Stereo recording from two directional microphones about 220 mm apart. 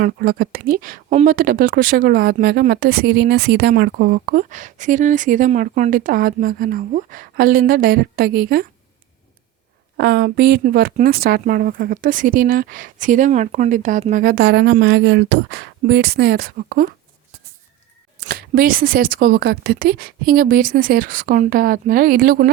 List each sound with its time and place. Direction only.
0.0 s speech: 45° right (ahead or behind)
10.0 s speech: 45° right (ahead or behind)
18.3 s speech: 45° right (ahead or behind)